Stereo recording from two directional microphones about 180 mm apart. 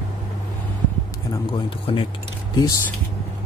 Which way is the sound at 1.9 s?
30° left (ahead or behind).